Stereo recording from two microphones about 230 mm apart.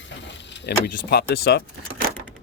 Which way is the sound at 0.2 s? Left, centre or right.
Left.